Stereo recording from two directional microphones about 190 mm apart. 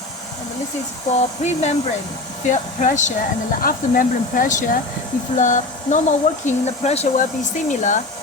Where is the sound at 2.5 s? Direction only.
40° left (ahead or behind).